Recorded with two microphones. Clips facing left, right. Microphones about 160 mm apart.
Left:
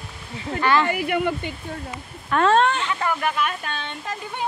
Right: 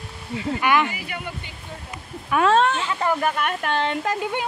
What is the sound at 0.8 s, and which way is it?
Speech, 60° left (ahead or behind).